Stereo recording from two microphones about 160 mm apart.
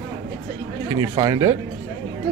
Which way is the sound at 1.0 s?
25° right (ahead or behind).